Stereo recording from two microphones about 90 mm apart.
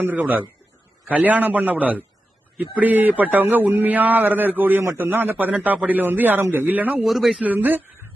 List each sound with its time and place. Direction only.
0.0 s a man's voice: 20° right (ahead or behind)
7.0 s a man's voice: centre (ahead or behind)
7.4 s a man's voice: 20° right (ahead or behind)